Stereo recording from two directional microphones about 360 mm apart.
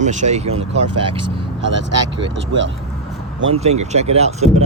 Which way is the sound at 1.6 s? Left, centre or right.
Right.